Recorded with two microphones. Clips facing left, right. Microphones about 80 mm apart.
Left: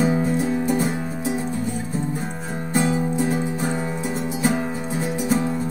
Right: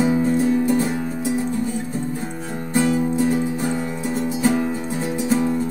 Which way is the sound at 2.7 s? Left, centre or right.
Centre.